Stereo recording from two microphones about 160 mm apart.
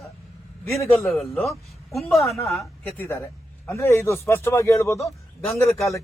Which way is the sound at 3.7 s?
15° left (ahead or behind).